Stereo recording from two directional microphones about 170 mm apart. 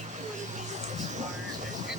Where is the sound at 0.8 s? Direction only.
45° right (ahead or behind).